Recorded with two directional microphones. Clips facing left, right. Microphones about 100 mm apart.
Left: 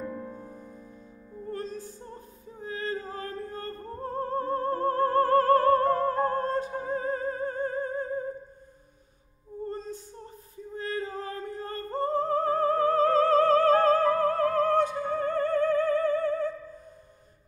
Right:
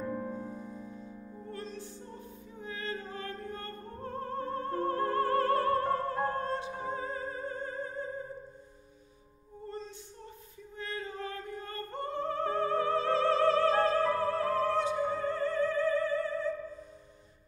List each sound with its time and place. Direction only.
1.5 s music: 40° left (ahead or behind)
9.7 s female singing: 45° left (ahead or behind)
10.7 s music: 35° left (ahead or behind); by 16.5 s 50° left (ahead or behind)